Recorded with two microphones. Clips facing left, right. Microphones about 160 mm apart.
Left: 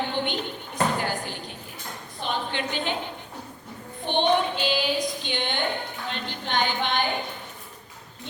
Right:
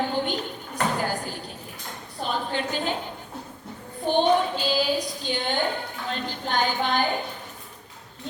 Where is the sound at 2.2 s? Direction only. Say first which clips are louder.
Right 1 dB; 40° right (ahead or behind).